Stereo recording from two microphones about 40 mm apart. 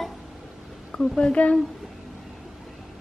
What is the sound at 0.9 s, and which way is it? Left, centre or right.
Speech, left.